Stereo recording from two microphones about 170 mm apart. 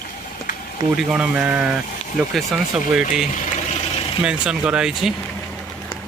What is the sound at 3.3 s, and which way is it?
Engine, 45° left (ahead or behind).